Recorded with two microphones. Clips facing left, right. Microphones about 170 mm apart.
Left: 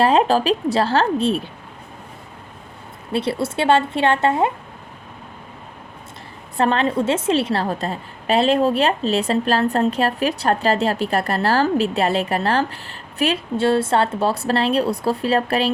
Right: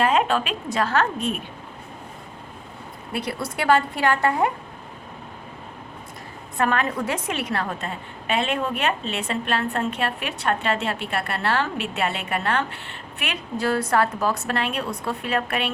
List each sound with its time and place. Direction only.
0.0 s a woman's voice: 30° left (ahead or behind)
3.1 s a woman's voice: 30° left (ahead or behind)
6.6 s a woman's voice: 30° left (ahead or behind)